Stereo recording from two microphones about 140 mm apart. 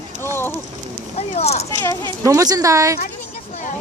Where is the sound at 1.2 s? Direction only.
50° left (ahead or behind).